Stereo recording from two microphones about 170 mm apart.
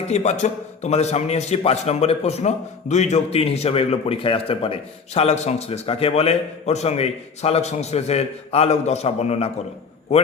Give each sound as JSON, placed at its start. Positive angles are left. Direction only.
{"t": 0.1, "sound": "a man's voice", "side_deg": 40}